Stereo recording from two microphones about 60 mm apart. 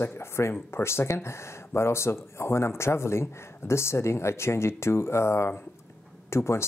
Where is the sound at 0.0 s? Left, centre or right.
Left.